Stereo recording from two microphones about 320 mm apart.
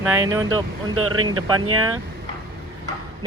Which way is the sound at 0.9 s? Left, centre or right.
Right.